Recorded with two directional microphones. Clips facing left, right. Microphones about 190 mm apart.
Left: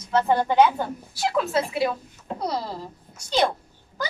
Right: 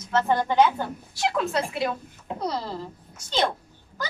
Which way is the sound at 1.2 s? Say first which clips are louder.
Left 2 dB; centre (ahead or behind).